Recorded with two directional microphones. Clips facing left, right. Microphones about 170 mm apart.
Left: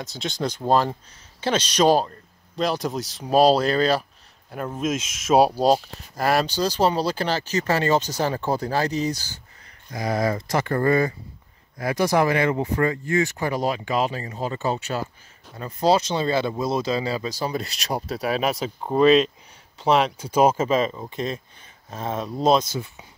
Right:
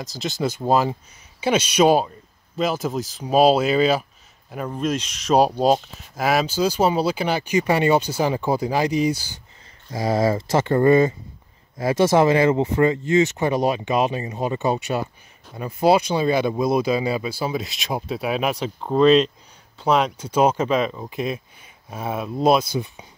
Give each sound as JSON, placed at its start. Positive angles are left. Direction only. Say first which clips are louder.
{"t": 0.0, "sound": "speech", "louder": "right 2 dB", "side_deg": 0}
{"t": 9.8, "sound": "speech", "louder": "right 4 dB", "side_deg": -25}